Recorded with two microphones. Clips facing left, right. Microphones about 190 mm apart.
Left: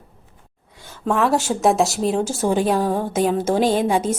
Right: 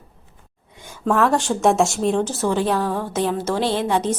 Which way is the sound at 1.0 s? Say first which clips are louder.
Right 1 dB; 5° left (ahead or behind).